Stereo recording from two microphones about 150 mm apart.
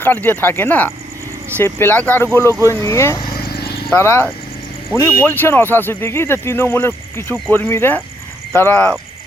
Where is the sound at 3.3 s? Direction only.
90° left.